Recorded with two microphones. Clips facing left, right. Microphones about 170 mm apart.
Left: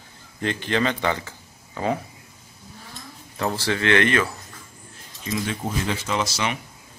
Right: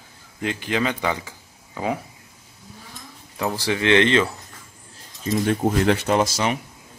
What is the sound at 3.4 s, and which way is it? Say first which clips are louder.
Speech: right 1 dB; 10° right (ahead or behind).